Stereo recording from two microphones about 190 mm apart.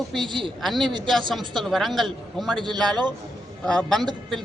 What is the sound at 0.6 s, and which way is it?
A man's voice, centre (ahead or behind).